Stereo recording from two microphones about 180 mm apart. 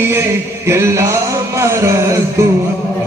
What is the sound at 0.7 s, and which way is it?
Music, 15° right (ahead or behind).